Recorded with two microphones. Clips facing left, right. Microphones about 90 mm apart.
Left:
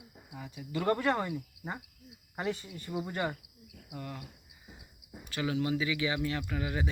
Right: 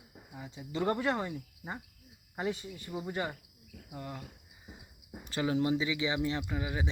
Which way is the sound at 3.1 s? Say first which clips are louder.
Even; 5° right (ahead or behind).